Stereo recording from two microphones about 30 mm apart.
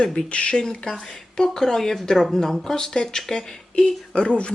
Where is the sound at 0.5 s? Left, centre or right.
Left.